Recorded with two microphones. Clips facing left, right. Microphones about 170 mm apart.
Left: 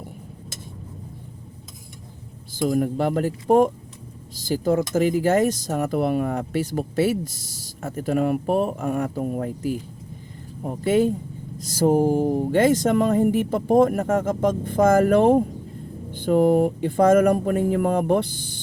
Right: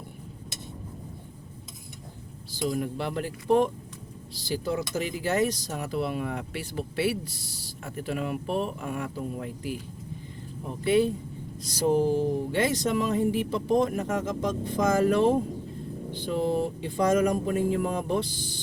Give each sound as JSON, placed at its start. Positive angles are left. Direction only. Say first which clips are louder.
{"t": 2.5, "sound": "speech", "louder": "left 7 dB", "side_deg": 50}
{"t": 4.4, "sound": "speech", "louder": "left 8 dB", "side_deg": 45}